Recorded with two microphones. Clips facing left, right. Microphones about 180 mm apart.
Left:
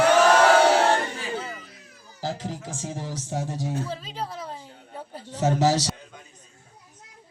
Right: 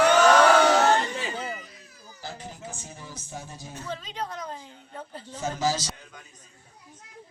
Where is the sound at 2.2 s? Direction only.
90° left.